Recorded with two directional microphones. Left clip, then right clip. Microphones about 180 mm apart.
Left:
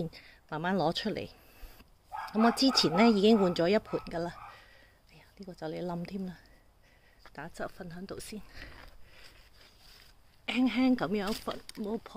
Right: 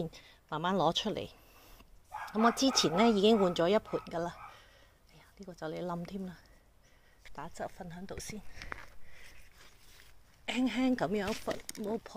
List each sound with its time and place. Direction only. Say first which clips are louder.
0.0 s a sound: left 1 dB; 15° left (ahead or behind)
2.3 s speech: left 2 dB; 20° left (ahead or behind)
10.4 s a woman's voice: left 3 dB; 10° left (ahead or behind)